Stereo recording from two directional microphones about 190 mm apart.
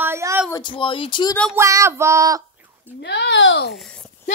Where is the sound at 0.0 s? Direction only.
15° right (ahead or behind).